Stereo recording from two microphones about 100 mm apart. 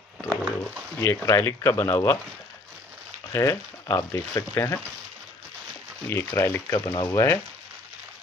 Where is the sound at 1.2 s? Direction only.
30° left (ahead or behind).